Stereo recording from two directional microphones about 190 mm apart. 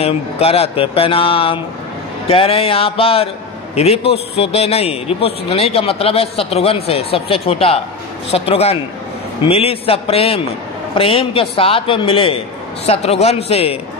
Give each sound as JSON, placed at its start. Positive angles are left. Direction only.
{"t": 0.0, "sound": "a man's voice", "side_deg": 30}